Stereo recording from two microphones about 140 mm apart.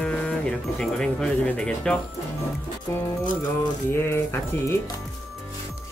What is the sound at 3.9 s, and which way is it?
Speech, 15° left (ahead or behind).